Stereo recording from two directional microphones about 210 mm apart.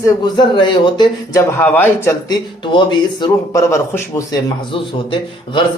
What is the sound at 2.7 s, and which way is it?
Speech, 20° left (ahead or behind).